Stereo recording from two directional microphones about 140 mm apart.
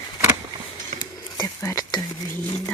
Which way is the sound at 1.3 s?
25° left (ahead or behind).